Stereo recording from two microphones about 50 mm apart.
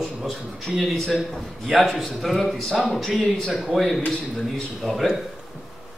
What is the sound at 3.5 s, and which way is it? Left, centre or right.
A man's voice, centre.